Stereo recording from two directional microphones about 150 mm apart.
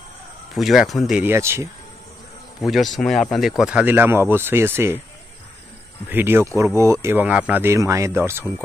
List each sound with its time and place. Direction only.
0.6 s speech: centre (ahead or behind)
1.2 s speech: 15° right (ahead or behind)
2.6 s speech: centre (ahead or behind)
6.0 s speech: 15° right (ahead or behind)